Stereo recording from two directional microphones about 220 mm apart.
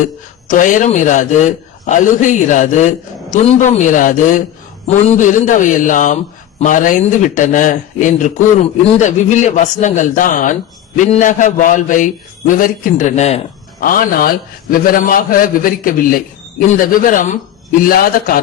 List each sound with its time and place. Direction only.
0.0 s speech: 35° left (ahead or behind)